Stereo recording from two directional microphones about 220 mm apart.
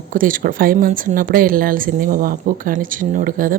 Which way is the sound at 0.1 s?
40° right (ahead or behind).